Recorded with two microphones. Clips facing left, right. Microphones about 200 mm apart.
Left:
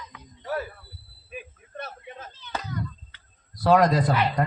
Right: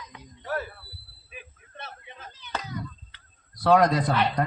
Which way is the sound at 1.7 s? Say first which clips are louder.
Left 6 dB; 45° left (ahead or behind).